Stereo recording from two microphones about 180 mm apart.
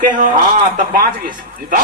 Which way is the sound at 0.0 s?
45° right (ahead or behind).